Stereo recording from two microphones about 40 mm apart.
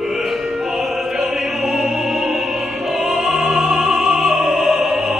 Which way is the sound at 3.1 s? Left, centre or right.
Centre.